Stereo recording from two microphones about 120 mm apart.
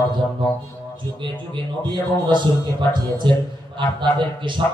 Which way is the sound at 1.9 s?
40° right (ahead or behind).